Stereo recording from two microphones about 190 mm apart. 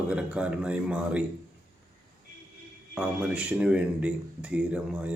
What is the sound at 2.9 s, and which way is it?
Speech, 5° right (ahead or behind).